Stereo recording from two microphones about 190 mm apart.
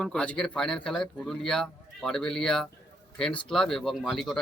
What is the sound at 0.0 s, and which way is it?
Speech, 5° left (ahead or behind).